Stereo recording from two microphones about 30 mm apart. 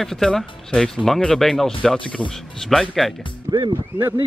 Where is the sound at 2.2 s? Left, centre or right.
Left.